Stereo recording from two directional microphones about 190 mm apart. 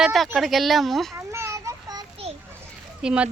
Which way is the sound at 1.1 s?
15° right (ahead or behind).